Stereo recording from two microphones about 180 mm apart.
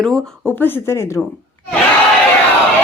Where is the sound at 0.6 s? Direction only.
15° left (ahead or behind).